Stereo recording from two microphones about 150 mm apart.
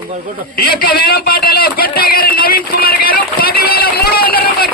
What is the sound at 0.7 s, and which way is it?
Speech, 90° left.